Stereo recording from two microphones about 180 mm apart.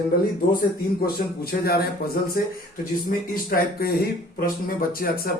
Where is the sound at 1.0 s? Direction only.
60° left (ahead or behind).